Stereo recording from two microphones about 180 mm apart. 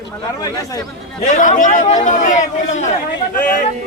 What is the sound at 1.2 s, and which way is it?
A man's voice, 45° left (ahead or behind).